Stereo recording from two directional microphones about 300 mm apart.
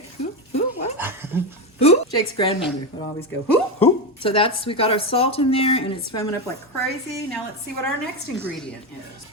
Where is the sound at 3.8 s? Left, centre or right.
Centre.